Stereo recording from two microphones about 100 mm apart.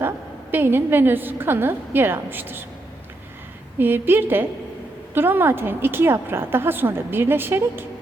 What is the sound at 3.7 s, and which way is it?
A woman's voice, 20° right (ahead or behind).